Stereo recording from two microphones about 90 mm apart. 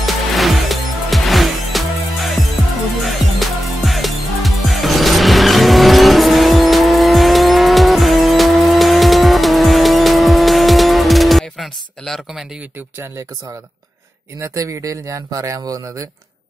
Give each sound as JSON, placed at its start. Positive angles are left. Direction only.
{"t": 0.0, "sound": "music", "side_deg": 0}
{"t": 14.4, "sound": "speech", "side_deg": -35}